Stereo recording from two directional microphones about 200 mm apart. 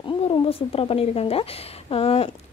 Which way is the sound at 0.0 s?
25° left (ahead or behind).